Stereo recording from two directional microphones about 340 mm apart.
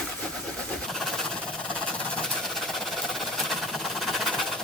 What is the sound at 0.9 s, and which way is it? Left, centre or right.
Vehicle, centre.